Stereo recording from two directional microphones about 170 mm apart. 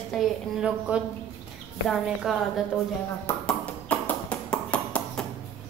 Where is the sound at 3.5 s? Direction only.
10° left (ahead or behind).